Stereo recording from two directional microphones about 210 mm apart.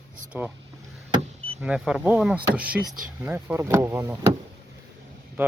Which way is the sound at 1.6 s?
5° right (ahead or behind).